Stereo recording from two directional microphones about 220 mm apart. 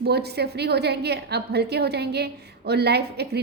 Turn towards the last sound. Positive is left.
turn(degrees=-50)  # may be behind; listen again after turning